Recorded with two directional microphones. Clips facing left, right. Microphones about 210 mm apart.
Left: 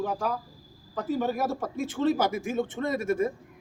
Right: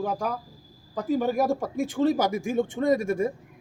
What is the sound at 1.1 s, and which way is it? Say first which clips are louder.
Speech: right 4 dB; 15° right (ahead or behind).